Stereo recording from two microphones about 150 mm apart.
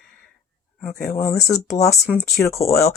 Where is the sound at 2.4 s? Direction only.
20° left (ahead or behind).